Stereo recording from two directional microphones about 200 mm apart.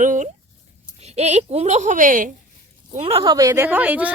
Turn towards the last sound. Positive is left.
turn(degrees=-5)  # may be behind; listen again after turning